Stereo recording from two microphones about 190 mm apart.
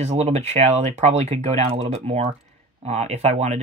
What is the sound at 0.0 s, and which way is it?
Speech, 35° right (ahead or behind).